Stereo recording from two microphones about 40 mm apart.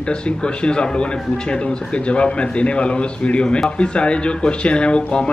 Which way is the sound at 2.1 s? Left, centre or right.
Left.